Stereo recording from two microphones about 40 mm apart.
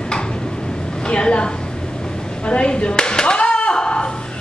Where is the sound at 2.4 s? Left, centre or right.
Left.